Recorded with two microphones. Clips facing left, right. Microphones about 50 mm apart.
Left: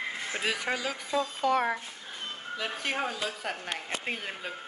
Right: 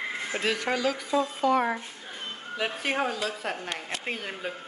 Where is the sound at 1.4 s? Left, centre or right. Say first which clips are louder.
Right 2 dB; right.